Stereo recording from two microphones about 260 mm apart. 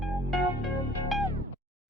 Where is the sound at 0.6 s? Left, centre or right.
Centre.